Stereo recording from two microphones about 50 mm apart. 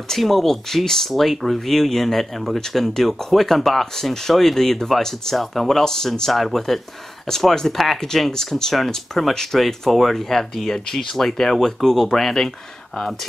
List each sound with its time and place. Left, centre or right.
0.1 s speech: centre